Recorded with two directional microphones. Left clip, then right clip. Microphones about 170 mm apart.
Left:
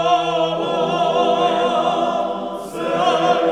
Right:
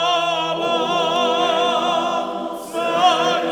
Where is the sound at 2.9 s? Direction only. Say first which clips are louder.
Right 1 dB; 30° right (ahead or behind).